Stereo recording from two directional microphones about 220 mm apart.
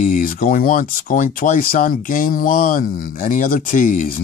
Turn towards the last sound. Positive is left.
turn(degrees=40)  # may be behind; listen again after turning